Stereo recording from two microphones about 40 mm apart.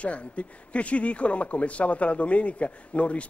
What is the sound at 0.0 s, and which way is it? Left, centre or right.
Speech, left.